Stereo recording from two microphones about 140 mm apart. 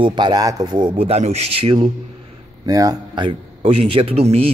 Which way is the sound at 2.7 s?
25° right (ahead or behind).